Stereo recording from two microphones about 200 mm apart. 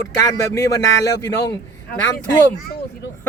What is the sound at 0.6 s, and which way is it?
Speech, 15° left (ahead or behind).